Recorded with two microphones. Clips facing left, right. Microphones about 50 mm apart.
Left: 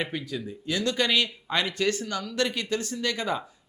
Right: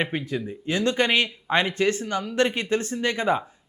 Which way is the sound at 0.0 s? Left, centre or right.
Right.